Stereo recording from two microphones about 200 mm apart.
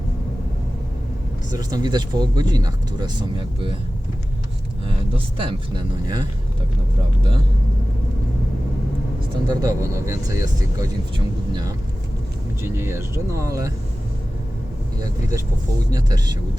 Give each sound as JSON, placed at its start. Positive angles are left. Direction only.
{"t": 1.5, "sound": "speech", "side_deg": -20}
{"t": 5.1, "sound": "speech", "side_deg": -25}
{"t": 9.5, "sound": "speech", "side_deg": -20}
{"t": 12.6, "sound": "speech", "side_deg": -10}
{"t": 15.0, "sound": "speech", "side_deg": -15}